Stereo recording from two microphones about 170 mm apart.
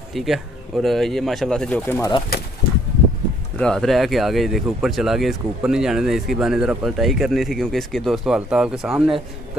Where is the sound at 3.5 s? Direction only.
5° left (ahead or behind).